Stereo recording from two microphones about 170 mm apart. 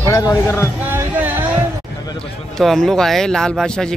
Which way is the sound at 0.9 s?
10° right (ahead or behind).